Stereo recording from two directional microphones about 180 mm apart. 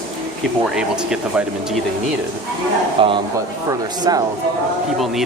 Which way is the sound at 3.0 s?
30° right (ahead or behind).